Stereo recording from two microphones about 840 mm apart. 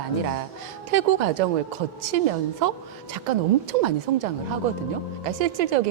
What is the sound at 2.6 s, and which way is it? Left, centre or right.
A woman's voice, right.